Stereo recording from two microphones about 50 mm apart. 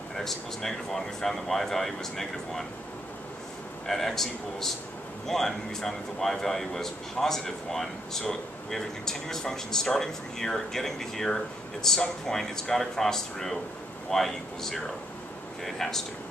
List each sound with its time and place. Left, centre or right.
0.1 s speech: centre
3.8 s speech: centre